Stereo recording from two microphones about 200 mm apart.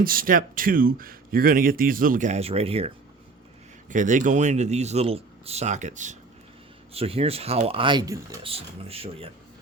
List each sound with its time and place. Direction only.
0.0 s speech: 45° right (ahead or behind); by 2.9 s 30° right (ahead or behind)
3.8 s speech: 40° right (ahead or behind); by 8.4 s 15° right (ahead or behind)
8.4 s speech: 30° right (ahead or behind)